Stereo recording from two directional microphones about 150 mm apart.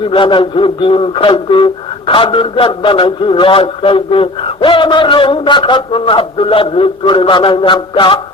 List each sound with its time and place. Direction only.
0.0 s speech: 35° left (ahead or behind)